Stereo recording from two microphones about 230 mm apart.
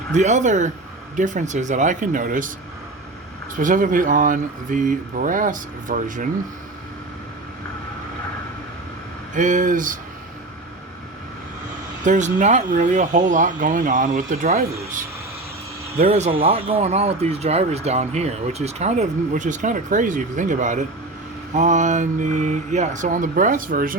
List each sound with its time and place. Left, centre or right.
0.1 s speech: right
3.5 s speech: right
9.3 s speech: right
12.0 s speech: right
16.0 s speech: right